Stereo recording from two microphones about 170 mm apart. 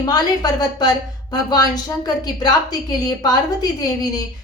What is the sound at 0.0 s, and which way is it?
Speech, 25° left (ahead or behind).